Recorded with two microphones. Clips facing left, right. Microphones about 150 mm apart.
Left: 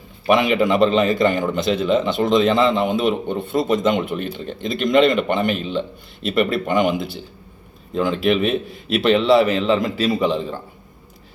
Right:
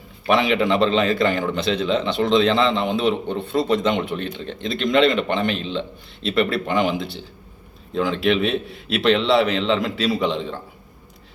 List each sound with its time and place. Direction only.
0.3 s a man's voice: 5° left (ahead or behind)
3.6 s speech: 45° left (ahead or behind)
3.8 s a man's voice: centre (ahead or behind)